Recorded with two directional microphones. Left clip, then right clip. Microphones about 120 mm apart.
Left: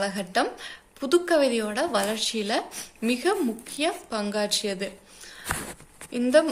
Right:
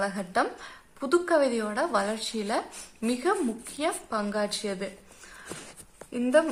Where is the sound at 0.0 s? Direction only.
15° left (ahead or behind).